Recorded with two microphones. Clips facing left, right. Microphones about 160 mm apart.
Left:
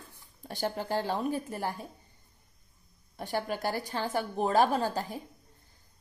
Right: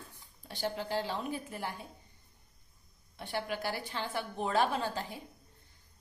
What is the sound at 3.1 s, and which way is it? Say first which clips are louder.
A woman's voice: left 4 dB; 40° left (ahead or behind).